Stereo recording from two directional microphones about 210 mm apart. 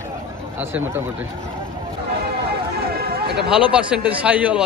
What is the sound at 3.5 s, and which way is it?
A man's voice, 5° right (ahead or behind).